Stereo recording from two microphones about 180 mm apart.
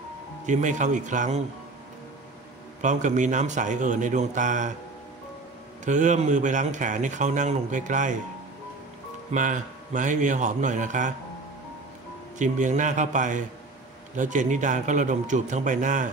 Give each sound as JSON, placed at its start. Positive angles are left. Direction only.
{"t": 0.5, "sound": "a man's voice", "side_deg": -45}
{"t": 2.8, "sound": "a man's voice", "side_deg": -45}
{"t": 5.9, "sound": "a man's voice", "side_deg": -45}
{"t": 9.3, "sound": "a man's voice", "side_deg": -45}
{"t": 12.4, "sound": "a man's voice", "side_deg": -45}